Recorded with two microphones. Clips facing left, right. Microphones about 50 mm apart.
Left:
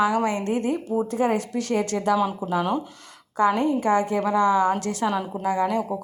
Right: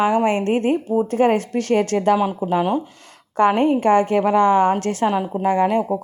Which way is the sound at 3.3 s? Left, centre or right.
Right.